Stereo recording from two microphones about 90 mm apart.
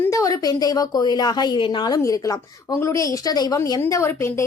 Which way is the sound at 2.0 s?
40° left (ahead or behind).